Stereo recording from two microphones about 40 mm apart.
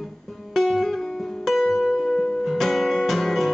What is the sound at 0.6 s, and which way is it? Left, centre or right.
Guitar, centre.